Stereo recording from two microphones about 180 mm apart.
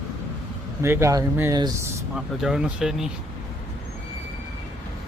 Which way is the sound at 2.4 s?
5° right (ahead or behind).